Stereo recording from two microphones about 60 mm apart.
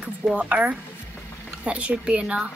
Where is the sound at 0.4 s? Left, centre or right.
Right.